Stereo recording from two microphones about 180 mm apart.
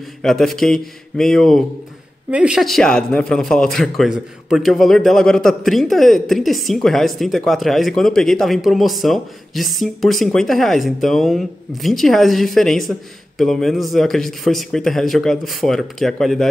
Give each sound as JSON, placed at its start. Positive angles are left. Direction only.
{"t": 0.2, "sound": "speech", "side_deg": 0}